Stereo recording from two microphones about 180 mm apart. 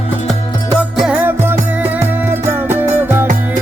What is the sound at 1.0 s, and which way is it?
Music, 5° right (ahead or behind).